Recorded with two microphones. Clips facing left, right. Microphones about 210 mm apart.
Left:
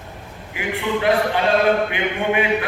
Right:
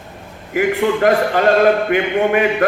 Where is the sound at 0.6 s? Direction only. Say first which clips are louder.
Right 8 dB; 40° right (ahead or behind).